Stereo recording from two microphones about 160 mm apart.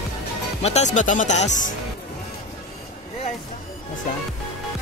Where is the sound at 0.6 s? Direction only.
45° left (ahead or behind).